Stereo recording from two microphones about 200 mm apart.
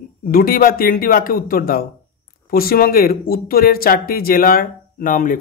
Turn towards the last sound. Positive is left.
turn(degrees=45)  # may be behind; listen again after turning